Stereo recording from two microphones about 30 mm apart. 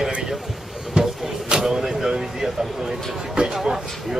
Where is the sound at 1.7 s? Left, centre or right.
Centre.